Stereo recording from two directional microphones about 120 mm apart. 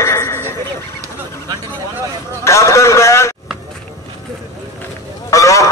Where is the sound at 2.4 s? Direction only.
25° left (ahead or behind).